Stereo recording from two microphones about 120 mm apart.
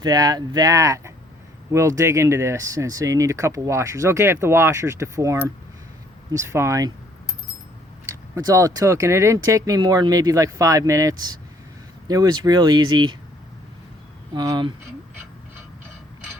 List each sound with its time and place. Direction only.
0.0 s speech: 35° right (ahead or behind)
8.0 s speech: 30° right (ahead or behind)
14.3 s speech: 35° right (ahead or behind)